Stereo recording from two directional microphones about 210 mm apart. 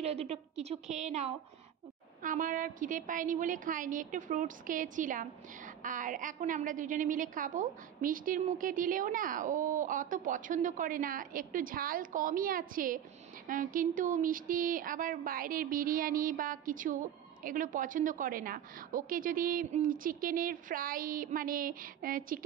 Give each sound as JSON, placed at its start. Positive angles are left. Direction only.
{"t": 0.0, "sound": "a woman's voice", "side_deg": -30}